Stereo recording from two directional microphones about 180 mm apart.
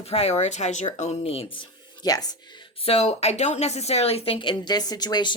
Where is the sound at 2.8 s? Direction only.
35° left (ahead or behind).